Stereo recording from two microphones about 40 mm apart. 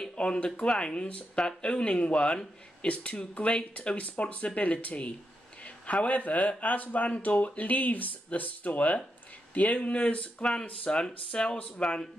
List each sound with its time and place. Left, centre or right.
0.1 s speech: left